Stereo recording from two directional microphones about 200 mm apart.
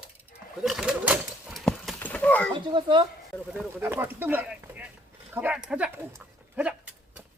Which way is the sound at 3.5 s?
10° right (ahead or behind).